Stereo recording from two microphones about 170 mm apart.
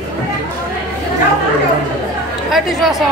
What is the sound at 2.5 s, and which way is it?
Speech, centre (ahead or behind).